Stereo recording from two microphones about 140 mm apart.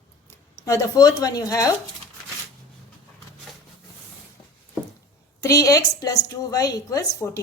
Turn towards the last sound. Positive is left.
turn(degrees=25)  # may be behind; listen again after turning